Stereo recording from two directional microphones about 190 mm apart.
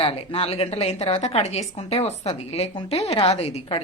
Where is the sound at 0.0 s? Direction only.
30° left (ahead or behind).